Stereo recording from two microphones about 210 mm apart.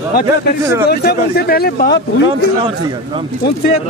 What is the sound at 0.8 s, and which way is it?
Speech, 50° left (ahead or behind).